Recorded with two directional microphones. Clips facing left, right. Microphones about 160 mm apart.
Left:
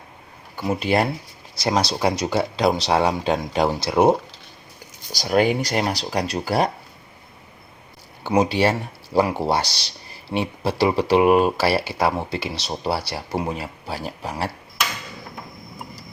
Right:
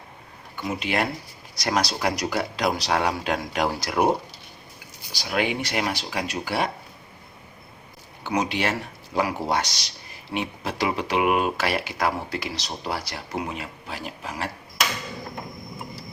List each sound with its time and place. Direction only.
0.5 s speech: 35° left (ahead or behind)
5.1 s speech: 40° left (ahead or behind)
8.2 s speech: 30° left (ahead or behind)